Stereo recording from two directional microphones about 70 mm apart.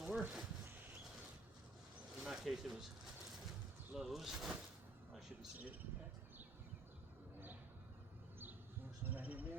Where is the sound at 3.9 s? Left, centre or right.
Centre.